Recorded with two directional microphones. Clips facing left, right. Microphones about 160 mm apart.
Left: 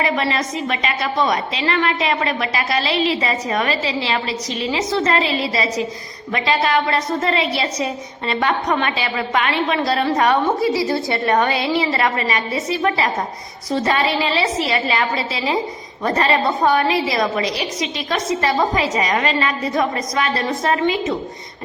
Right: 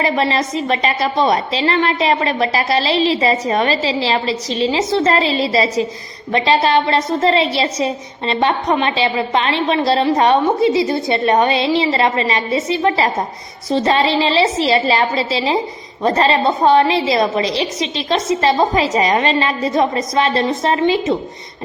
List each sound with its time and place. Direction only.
0.0 s a woman's voice: 30° right (ahead or behind)